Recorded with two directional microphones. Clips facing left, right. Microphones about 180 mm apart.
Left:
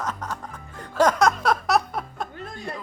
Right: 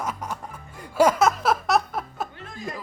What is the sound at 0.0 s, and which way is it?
Music, 10° right (ahead or behind).